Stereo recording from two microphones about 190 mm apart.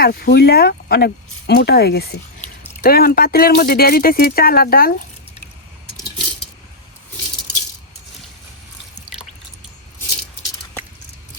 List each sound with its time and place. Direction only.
0.0 s speech: 55° left (ahead or behind)